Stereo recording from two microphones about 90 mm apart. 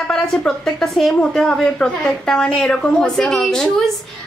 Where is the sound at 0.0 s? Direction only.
10° left (ahead or behind).